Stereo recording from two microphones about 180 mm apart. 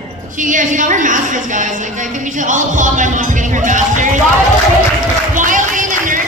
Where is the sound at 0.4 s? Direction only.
45° right (ahead or behind).